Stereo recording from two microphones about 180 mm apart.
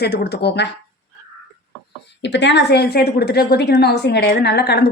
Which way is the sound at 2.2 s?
80° left.